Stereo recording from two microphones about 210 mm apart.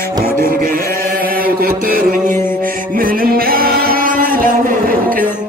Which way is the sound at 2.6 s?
40° right (ahead or behind).